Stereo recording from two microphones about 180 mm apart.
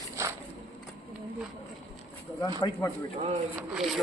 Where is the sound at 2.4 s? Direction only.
20° left (ahead or behind).